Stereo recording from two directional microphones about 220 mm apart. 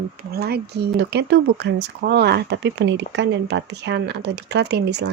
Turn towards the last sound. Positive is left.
turn(degrees=-50)  # may be behind; listen again after turning